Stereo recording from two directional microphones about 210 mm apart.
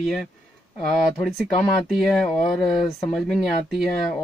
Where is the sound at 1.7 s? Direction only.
Centre (ahead or behind).